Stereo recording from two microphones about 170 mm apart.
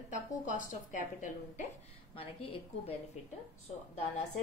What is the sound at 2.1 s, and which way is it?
Speech, 35° left (ahead or behind).